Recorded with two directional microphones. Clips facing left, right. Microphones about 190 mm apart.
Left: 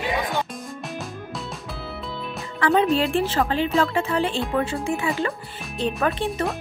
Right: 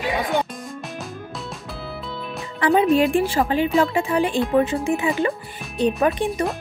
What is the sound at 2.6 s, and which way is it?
Speech, 15° right (ahead or behind).